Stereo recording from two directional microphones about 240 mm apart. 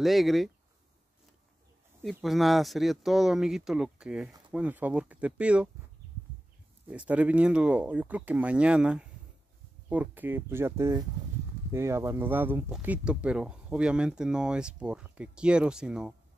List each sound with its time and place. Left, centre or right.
0.0 s speech: centre
2.0 s speech: centre
6.9 s speech: centre